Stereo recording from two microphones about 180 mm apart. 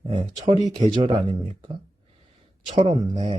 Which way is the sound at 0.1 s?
25° right (ahead or behind).